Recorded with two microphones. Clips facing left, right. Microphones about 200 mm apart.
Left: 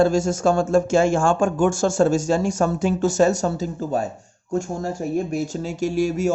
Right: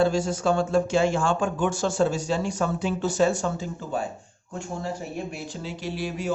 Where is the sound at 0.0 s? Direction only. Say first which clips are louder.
Left 5 dB; 45° left (ahead or behind).